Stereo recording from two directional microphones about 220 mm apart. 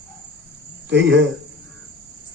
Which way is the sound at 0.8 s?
55° right (ahead or behind).